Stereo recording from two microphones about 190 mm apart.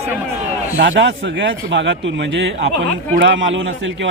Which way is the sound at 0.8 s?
70° right (ahead or behind).